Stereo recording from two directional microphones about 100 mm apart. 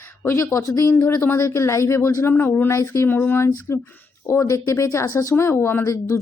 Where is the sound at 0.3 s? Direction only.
30° left (ahead or behind).